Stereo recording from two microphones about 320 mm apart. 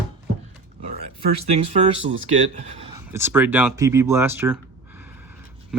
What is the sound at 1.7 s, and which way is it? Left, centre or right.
A man's voice, centre.